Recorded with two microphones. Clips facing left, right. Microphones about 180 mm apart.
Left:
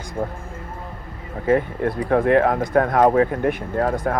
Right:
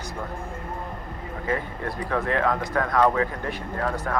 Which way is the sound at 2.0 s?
50° left (ahead or behind).